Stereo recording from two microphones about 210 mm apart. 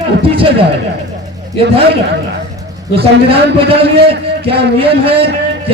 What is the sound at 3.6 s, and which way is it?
A man's voice, 25° right (ahead or behind).